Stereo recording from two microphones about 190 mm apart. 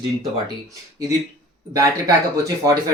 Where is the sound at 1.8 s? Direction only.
15° right (ahead or behind).